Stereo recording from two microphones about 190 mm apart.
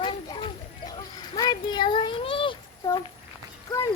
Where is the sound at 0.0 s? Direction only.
25° left (ahead or behind).